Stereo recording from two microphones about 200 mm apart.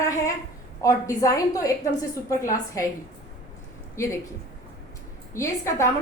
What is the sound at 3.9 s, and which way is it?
Speech, 15° left (ahead or behind).